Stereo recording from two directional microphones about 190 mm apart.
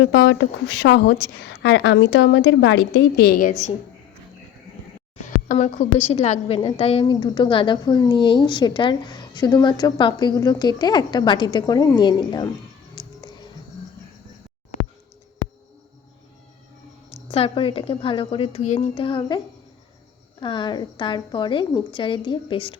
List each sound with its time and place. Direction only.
0.0 s a woman's voice: 70° left (ahead or behind); by 3.5 s 50° left (ahead or behind)
5.5 s a woman's voice: 40° left (ahead or behind); by 12.5 s 20° left (ahead or behind)
13.0 s music: 20° left (ahead or behind)
17.1 s a sound: 10° left (ahead or behind)
17.3 s a woman's voice: 30° left (ahead or behind)
20.4 s a woman's voice: 25° left (ahead or behind)